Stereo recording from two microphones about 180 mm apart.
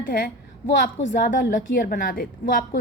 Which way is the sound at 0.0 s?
50° left (ahead or behind).